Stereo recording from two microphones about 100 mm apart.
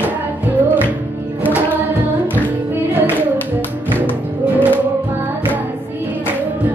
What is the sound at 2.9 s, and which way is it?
Music, 20° right (ahead or behind).